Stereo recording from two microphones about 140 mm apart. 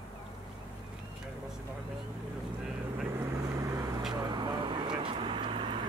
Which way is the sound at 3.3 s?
20° right (ahead or behind).